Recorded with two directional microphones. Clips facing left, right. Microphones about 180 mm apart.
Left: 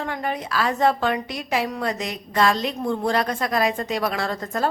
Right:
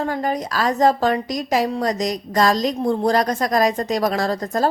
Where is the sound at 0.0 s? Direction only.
40° right (ahead or behind).